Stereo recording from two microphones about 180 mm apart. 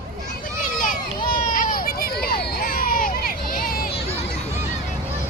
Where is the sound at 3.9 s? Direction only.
35° left (ahead or behind).